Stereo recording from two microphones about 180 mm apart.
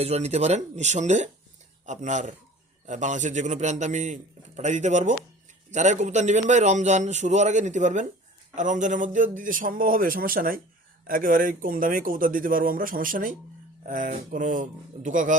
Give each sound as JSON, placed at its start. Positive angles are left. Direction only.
{"t": 0.0, "sound": "a man's voice", "side_deg": -35}